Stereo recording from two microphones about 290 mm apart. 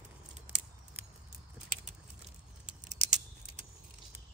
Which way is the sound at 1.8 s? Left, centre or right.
Right.